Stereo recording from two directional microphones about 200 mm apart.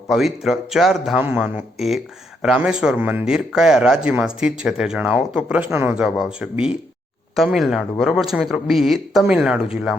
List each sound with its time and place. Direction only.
0.1 s speech: centre (ahead or behind)